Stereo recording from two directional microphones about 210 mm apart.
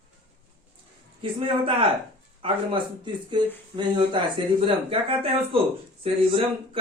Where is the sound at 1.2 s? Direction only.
25° right (ahead or behind).